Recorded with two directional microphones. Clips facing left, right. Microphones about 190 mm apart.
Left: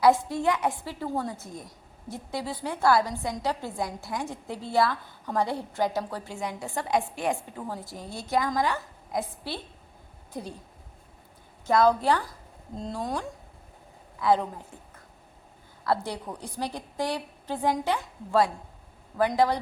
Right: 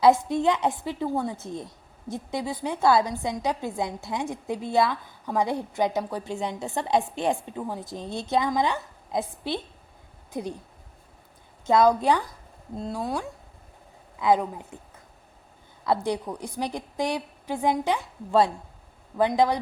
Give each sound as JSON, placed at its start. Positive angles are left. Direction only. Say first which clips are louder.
{"t": 0.0, "sound": "a woman's voice", "louder": "right 2 dB", "side_deg": -20}
{"t": 1.4, "sound": "a woman's voice", "louder": "right 6 dB", "side_deg": -25}
{"t": 11.6, "sound": "a woman's voice", "louder": "right 2 dB", "side_deg": -20}
{"t": 12.7, "sound": "a woman's voice", "louder": "right 2 dB", "side_deg": -5}
{"t": 15.9, "sound": "a woman's voice", "louder": "right 3 dB", "side_deg": -15}